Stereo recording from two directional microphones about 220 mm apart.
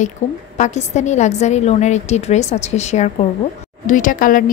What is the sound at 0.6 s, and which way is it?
A woman's voice, 30° left (ahead or behind).